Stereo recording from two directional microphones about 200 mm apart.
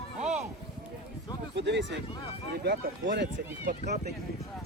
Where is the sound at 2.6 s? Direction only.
55° right (ahead or behind).